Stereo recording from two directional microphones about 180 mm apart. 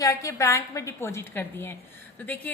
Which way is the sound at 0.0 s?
15° left (ahead or behind).